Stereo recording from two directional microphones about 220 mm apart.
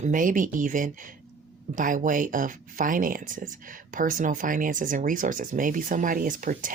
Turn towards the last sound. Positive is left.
turn(degrees=-35)  # may be behind; listen again after turning